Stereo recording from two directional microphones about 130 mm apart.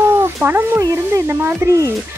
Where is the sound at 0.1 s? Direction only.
15° right (ahead or behind).